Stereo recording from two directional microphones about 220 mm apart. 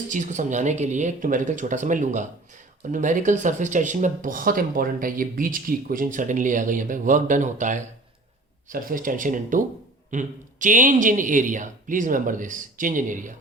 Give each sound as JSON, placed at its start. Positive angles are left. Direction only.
{"t": 0.1, "sound": "speech", "side_deg": -35}